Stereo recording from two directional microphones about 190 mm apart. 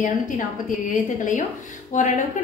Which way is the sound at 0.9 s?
40° left (ahead or behind).